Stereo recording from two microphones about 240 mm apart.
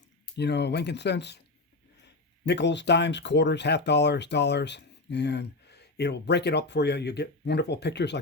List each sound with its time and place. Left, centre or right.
0.3 s speech: left
2.5 s speech: left